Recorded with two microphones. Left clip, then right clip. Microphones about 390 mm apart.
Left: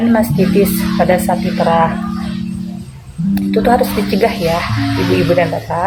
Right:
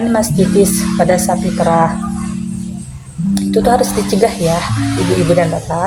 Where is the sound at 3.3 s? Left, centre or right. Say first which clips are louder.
Right 1 dB; right.